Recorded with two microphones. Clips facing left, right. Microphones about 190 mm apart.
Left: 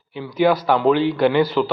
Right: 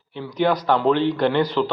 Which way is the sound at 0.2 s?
5° left (ahead or behind).